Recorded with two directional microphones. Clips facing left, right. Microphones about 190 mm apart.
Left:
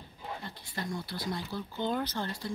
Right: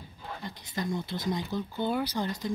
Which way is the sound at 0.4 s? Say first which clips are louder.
Right 9 dB; 15° right (ahead or behind).